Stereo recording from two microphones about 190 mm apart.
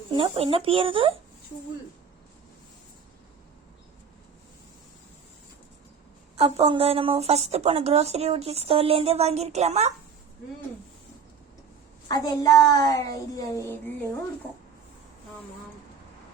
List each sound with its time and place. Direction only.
0.1 s speech: 30° right (ahead or behind)
6.3 s speech: 30° right (ahead or behind)
12.0 s speech: 20° left (ahead or behind)